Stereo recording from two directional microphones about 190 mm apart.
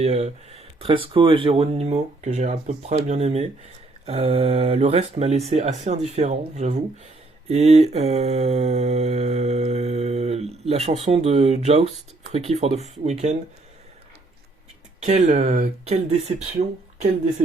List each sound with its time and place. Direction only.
0.0 s speech: 35° right (ahead or behind)
15.0 s speech: 35° right (ahead or behind)